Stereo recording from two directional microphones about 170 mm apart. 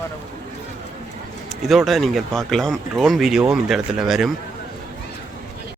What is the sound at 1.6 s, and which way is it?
Speech, centre (ahead or behind).